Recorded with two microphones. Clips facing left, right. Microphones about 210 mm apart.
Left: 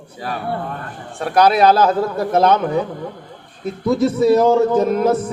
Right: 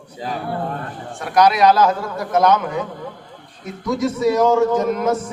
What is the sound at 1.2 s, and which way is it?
A man's voice, 30° left (ahead or behind).